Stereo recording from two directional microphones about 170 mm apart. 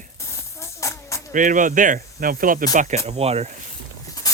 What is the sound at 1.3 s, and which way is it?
Speech, 50° right (ahead or behind).